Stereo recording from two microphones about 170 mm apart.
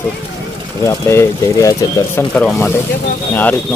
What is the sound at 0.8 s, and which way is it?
A man's voice, 15° left (ahead or behind).